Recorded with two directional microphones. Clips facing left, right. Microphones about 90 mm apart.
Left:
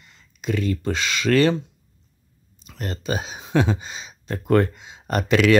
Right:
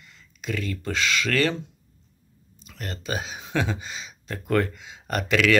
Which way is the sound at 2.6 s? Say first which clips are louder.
Left 5 dB; 25° left (ahead or behind).